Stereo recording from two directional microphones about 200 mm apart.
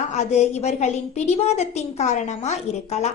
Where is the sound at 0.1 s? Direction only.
35° left (ahead or behind).